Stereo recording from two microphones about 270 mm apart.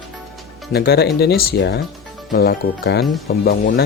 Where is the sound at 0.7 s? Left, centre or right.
Left.